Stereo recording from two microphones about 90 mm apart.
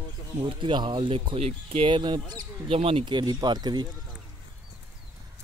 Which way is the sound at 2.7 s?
90° right.